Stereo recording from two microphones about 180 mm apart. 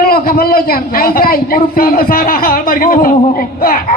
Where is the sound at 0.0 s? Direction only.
55° left (ahead or behind).